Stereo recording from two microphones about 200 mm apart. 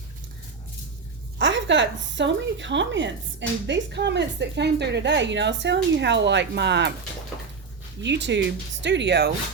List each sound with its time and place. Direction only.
1.4 s a woman's voice: 65° right (ahead or behind)
8.0 s a woman's voice: 60° right (ahead or behind)